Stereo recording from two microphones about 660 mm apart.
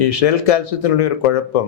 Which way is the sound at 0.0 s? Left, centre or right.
Left.